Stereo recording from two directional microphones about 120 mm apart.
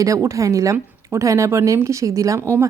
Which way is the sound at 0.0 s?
25° right (ahead or behind).